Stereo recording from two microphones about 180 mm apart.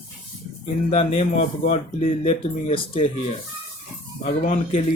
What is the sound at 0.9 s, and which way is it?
Speech, 40° left (ahead or behind).